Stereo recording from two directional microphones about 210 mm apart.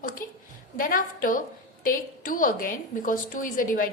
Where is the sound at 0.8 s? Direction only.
40° left (ahead or behind).